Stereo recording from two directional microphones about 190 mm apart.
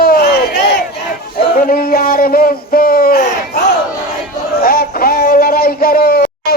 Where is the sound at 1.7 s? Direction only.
50° left (ahead or behind).